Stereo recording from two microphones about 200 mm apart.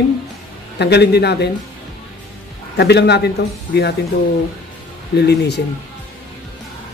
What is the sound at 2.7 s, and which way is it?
Speech, 55° left (ahead or behind).